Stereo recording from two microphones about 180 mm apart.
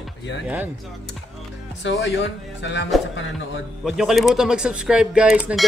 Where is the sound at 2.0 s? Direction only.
80° left.